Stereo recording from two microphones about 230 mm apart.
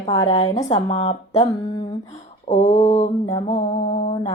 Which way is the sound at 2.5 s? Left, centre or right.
Left.